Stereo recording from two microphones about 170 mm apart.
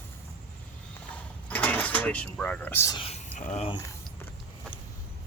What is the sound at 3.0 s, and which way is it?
Speech, 40° left (ahead or behind).